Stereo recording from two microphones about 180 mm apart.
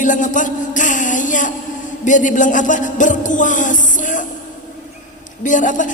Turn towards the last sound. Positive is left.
turn(degrees=45)  # may be behind; listen again after turning